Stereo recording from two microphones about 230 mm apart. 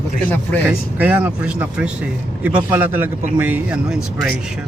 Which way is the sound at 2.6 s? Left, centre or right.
Centre.